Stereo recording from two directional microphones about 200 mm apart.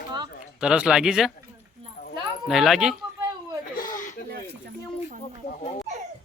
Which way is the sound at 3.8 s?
40° left (ahead or behind).